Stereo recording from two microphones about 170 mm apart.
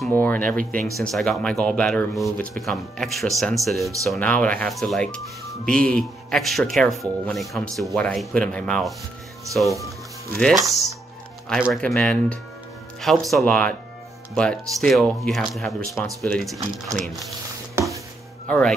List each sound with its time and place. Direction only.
0.1 s speech: 10° left (ahead or behind)
0.6 s speech: 55° right (ahead or behind)
0.9 s speech: centre (ahead or behind)
18.5 s speech: 5° left (ahead or behind)